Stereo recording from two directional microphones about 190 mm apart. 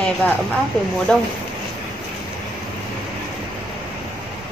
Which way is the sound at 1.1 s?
5° left (ahead or behind).